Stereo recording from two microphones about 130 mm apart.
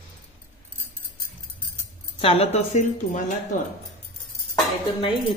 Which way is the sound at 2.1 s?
45° left (ahead or behind).